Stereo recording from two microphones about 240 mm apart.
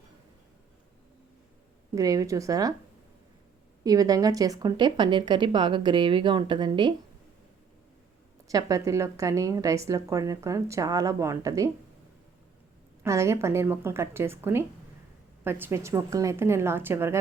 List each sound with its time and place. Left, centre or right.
2.0 s a woman's voice: centre
3.8 s speech: centre
8.4 s a woman's voice: centre
13.0 s a woman's voice: centre